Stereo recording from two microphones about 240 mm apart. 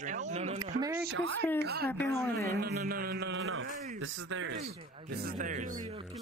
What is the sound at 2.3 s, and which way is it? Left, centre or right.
Speech, right.